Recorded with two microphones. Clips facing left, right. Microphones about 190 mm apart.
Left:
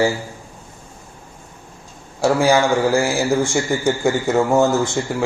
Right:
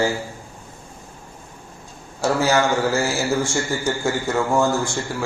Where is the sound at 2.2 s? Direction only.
15° left (ahead or behind).